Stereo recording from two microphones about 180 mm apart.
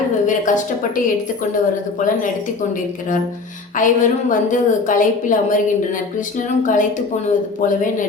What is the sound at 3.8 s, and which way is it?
A woman's voice, 45° left (ahead or behind).